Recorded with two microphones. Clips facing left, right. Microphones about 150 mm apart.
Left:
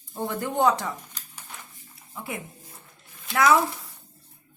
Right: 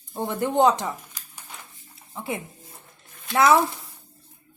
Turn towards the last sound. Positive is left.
turn(degrees=-25)  # may be behind; listen again after turning